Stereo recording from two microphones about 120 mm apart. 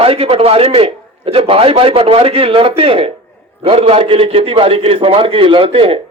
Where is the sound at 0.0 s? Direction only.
55° right (ahead or behind).